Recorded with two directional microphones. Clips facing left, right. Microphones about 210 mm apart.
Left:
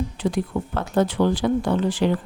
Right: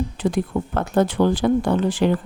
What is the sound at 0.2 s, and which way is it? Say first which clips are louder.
Speech: right 2 dB; 50° right (ahead or behind).